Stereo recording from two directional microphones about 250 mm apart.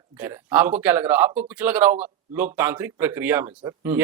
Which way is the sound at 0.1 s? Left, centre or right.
Centre.